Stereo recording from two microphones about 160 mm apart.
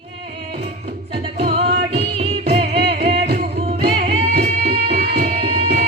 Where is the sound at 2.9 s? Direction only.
40° right (ahead or behind).